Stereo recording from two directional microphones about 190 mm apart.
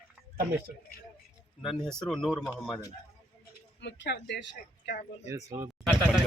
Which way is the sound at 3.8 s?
65° left (ahead or behind).